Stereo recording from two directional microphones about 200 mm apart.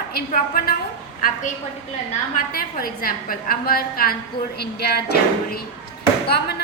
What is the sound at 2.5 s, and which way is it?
A woman's voice, 45° left (ahead or behind).